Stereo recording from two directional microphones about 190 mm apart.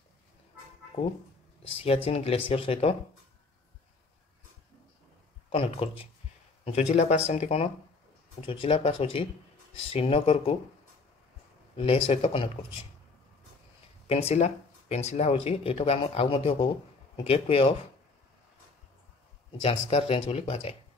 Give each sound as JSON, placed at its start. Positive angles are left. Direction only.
{"t": 1.6, "sound": "speech", "side_deg": 30}
{"t": 5.5, "sound": "speech", "side_deg": 30}
{"t": 11.7, "sound": "speech", "side_deg": 30}
{"t": 14.0, "sound": "speech", "side_deg": 35}
{"t": 19.9, "sound": "speech", "side_deg": 35}